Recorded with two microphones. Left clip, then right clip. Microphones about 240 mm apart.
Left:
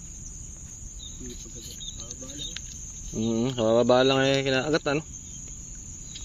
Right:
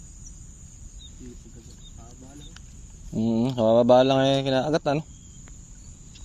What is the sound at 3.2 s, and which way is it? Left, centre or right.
Speech, right.